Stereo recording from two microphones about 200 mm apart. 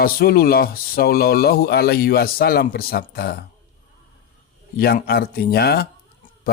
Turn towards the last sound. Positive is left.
turn(degrees=50)  # may be behind; listen again after turning